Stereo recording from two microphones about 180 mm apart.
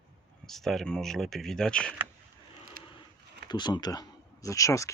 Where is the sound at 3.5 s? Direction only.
25° left (ahead or behind).